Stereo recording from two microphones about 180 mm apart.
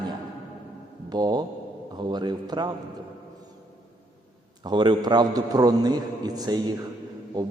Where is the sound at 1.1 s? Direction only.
25° right (ahead or behind).